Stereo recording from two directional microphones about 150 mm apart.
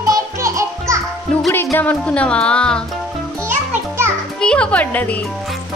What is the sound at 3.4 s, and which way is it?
Music, 15° right (ahead or behind).